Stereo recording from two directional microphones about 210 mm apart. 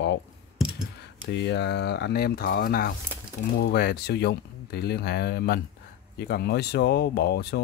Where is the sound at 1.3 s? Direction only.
55° left (ahead or behind).